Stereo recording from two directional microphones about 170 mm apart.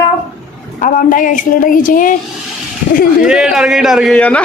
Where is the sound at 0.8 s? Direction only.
50° left (ahead or behind).